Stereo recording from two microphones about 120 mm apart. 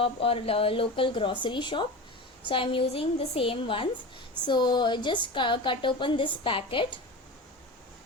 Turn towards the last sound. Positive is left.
turn(degrees=45)  # may be behind; listen again after turning